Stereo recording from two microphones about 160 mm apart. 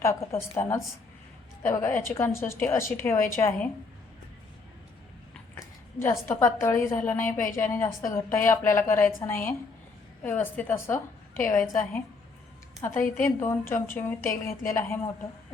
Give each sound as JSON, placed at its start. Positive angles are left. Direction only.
{"t": 0.0, "sound": "a woman's voice", "side_deg": 15}
{"t": 6.0, "sound": "a woman's voice", "side_deg": 15}